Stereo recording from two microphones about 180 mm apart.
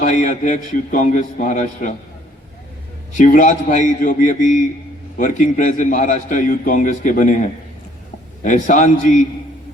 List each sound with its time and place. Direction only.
0.0 s a man's voice: 40° left (ahead or behind)
3.2 s a man's voice: 45° left (ahead or behind)